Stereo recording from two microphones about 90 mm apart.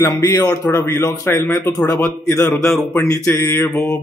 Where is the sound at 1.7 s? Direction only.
40° left (ahead or behind).